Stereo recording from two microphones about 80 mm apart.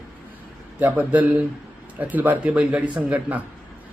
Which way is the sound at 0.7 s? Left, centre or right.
Centre.